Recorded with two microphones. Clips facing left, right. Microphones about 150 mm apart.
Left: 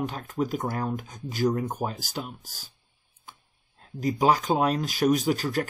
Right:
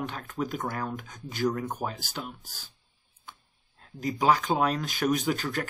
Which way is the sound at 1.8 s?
40° left (ahead or behind).